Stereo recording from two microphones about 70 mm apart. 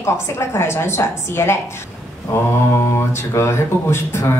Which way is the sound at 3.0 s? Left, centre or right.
Left.